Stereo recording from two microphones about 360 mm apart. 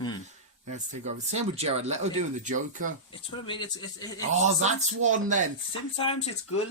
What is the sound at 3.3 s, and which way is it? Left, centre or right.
Speech, centre.